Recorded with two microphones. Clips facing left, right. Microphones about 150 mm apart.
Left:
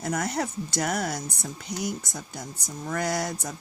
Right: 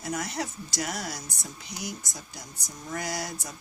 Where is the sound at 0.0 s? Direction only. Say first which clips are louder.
Left 4 dB; 55° left (ahead or behind).